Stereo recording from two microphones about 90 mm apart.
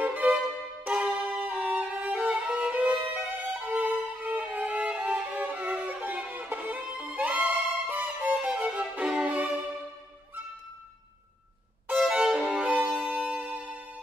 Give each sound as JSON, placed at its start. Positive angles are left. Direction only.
{"t": 0.0, "sound": "music", "side_deg": -20}
{"t": 0.8, "sound": "violin", "side_deg": -15}
{"t": 3.5, "sound": "music", "side_deg": -20}
{"t": 11.9, "sound": "music", "side_deg": -10}